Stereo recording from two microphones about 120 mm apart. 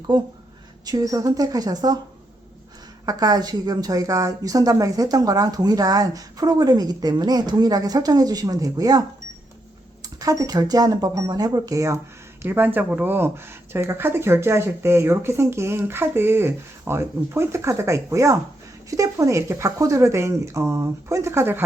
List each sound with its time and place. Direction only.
0.1 s speech: 45° right (ahead or behind)
0.9 s speech: 30° right (ahead or behind)
3.1 s speech: 35° right (ahead or behind)